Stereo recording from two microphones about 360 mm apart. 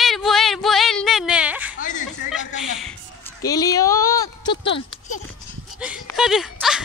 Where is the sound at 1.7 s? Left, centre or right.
Left.